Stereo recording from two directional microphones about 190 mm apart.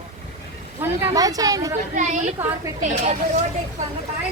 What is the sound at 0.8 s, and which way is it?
Speech, 20° right (ahead or behind).